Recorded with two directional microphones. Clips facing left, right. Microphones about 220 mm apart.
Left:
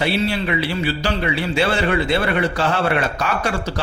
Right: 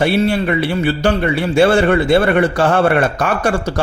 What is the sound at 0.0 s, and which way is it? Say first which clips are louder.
A man's voice: right 6 dB; 50° right (ahead or behind).